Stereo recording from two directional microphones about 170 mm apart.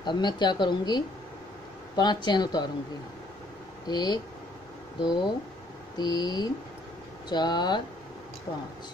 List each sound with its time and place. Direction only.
0.0 s speech: 25° left (ahead or behind)
3.8 s speech: 25° left (ahead or behind)